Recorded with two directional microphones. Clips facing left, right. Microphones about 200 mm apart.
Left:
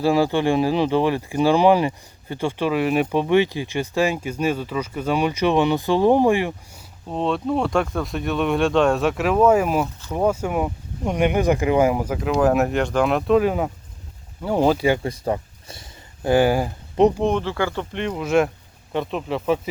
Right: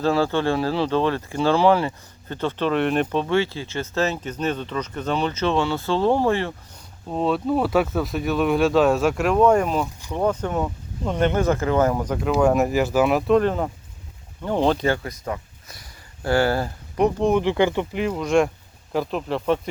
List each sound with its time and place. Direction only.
0.0 s speech: 15° left (ahead or behind)
7.1 s speech: centre (ahead or behind)
15.0 s speech: 30° left (ahead or behind); by 17.2 s 15° left (ahead or behind)
17.4 s speech: 20° right (ahead or behind)
17.9 s speech: 5° right (ahead or behind)